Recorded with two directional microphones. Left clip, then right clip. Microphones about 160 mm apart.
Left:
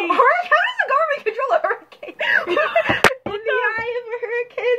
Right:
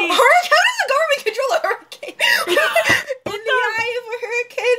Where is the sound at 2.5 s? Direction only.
20° right (ahead or behind).